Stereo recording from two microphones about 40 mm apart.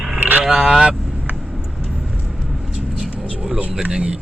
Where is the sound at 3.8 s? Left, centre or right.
Right.